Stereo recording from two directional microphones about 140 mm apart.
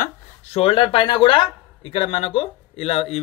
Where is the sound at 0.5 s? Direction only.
40° left (ahead or behind).